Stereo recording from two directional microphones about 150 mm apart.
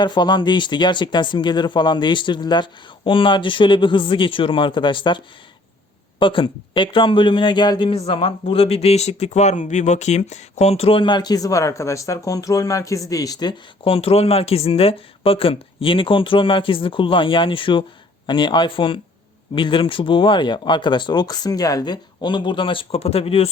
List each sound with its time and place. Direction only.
0.0 s a man's voice: 30° left (ahead or behind)